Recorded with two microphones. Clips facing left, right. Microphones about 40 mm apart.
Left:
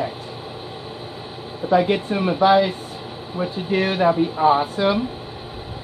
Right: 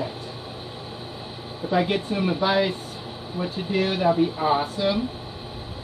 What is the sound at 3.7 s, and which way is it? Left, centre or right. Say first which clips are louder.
Speech: left 3 dB; left.